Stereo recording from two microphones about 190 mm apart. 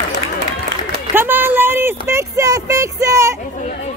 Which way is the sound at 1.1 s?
10° right (ahead or behind).